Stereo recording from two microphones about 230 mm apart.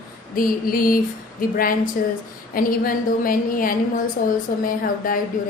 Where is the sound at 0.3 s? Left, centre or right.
Left.